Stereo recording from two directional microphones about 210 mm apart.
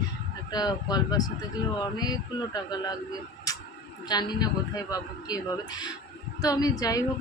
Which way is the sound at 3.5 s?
15° left (ahead or behind).